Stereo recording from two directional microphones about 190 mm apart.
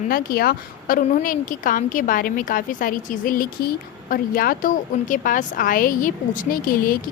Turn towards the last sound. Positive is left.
turn(degrees=50)  # may be behind; listen again after turning